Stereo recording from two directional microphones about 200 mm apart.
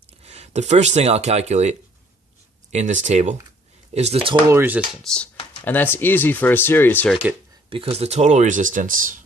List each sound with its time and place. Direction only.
0.2 s speech: 35° right (ahead or behind)
2.7 s speech: 35° right (ahead or behind)
4.4 s speech: 10° right (ahead or behind)
5.0 s speech: 5° left (ahead or behind)
7.7 s speech: 30° right (ahead or behind)